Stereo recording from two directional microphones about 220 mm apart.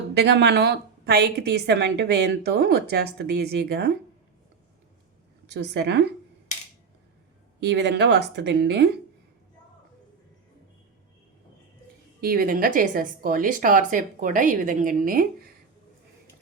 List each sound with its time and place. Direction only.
0.1 s a woman's voice: 50° right (ahead or behind)
5.5 s a woman's voice: 50° right (ahead or behind)
7.6 s a woman's voice: 50° right (ahead or behind)
12.2 s a woman's voice: 40° right (ahead or behind)